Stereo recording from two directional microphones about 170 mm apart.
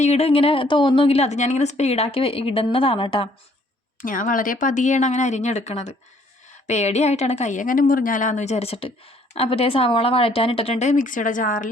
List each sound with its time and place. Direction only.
0.0 s a woman's voice: 40° left (ahead or behind)
4.0 s a woman's voice: 55° left (ahead or behind)